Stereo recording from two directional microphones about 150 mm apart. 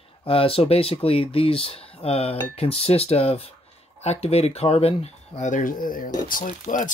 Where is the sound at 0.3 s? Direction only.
40° left (ahead or behind).